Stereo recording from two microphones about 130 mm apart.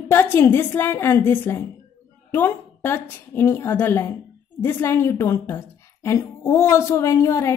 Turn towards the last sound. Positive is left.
turn(degrees=20)  # may be behind; listen again after turning